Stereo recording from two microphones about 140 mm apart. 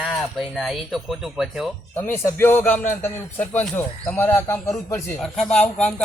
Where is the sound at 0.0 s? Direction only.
Centre (ahead or behind).